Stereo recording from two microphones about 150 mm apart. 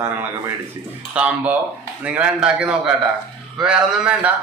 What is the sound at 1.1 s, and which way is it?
A man's voice, 10° right (ahead or behind).